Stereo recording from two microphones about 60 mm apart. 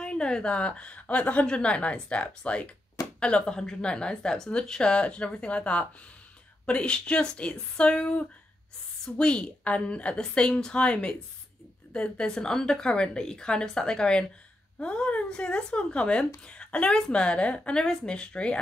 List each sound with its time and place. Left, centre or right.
0.0 s a woman's voice: centre